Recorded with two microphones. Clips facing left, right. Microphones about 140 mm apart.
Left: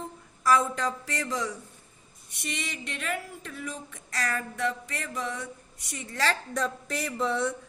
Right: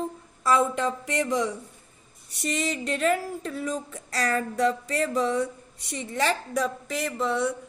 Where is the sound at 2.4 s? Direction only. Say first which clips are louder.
Right 8 dB; 40° right (ahead or behind).